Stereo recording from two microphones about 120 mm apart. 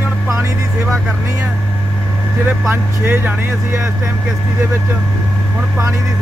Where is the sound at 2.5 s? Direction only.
20° right (ahead or behind).